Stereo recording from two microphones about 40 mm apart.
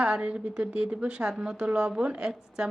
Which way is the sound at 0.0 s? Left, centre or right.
Right.